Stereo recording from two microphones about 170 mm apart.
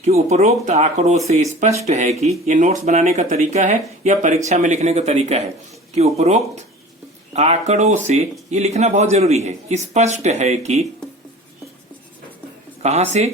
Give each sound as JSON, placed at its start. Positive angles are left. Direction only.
{"t": 0.0, "sound": "speech", "side_deg": -40}
{"t": 12.8, "sound": "speech", "side_deg": -40}